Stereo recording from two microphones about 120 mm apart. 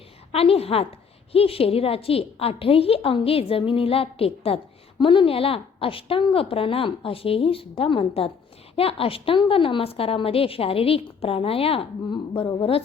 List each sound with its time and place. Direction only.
0.3 s a woman's voice: 55° left (ahead or behind)